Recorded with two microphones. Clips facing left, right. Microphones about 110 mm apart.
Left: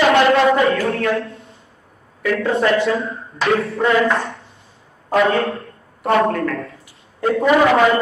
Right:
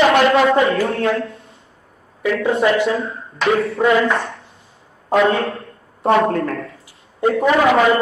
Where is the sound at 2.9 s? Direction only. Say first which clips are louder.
Even; centre (ahead or behind).